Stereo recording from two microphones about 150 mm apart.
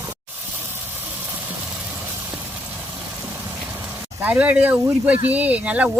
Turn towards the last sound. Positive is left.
turn(degrees=-10)  # may be behind; listen again after turning